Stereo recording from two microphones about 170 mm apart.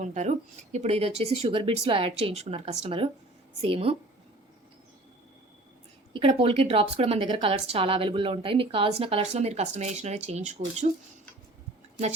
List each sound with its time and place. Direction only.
0.0 s a woman's voice: 45° right (ahead or behind)
6.1 s a woman's voice: 35° right (ahead or behind)